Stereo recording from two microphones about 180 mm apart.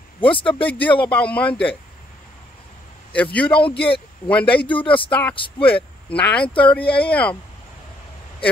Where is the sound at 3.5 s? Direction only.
30° left (ahead or behind).